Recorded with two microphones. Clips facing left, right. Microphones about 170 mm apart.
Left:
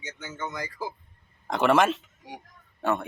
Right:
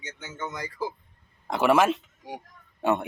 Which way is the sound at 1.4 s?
5° right (ahead or behind).